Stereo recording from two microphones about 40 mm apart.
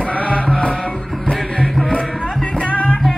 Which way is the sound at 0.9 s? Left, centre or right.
Centre.